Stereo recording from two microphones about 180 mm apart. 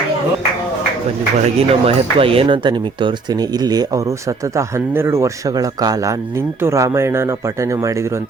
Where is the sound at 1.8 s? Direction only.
30° right (ahead or behind).